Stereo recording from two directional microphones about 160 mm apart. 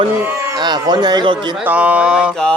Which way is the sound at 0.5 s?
25° right (ahead or behind).